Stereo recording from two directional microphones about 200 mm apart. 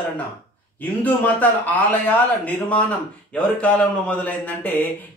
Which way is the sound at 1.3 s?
10° left (ahead or behind).